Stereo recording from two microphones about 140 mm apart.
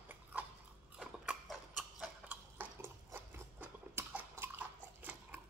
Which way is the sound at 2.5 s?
15° right (ahead or behind).